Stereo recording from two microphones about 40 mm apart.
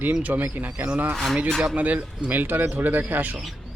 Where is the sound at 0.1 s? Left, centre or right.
Right.